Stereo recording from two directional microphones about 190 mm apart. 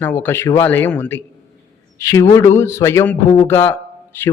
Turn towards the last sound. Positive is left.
turn(degrees=10)  # may be behind; listen again after turning